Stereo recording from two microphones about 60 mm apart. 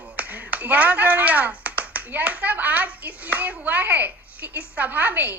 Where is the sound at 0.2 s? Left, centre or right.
Right.